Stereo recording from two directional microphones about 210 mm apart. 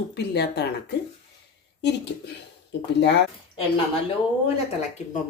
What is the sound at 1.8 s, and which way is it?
Speech, 55° left (ahead or behind).